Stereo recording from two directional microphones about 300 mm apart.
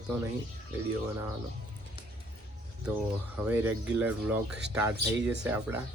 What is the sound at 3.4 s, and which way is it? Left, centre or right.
Speech, centre.